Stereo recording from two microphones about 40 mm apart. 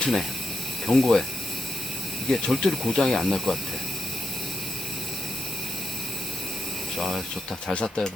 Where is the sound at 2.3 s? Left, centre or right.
Centre.